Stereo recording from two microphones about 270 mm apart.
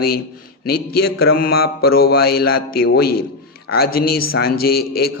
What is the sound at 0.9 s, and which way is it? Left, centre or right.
A man's voice, left.